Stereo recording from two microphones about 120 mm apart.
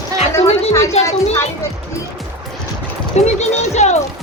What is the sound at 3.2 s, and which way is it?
Speech, 70° left (ahead or behind).